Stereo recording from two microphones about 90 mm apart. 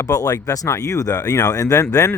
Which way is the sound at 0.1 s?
40° left (ahead or behind).